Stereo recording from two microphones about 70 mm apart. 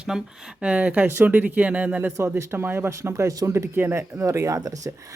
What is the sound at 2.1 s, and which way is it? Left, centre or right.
Speech, right.